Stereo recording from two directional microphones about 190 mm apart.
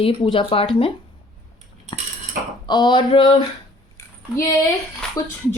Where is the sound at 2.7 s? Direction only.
20° left (ahead or behind).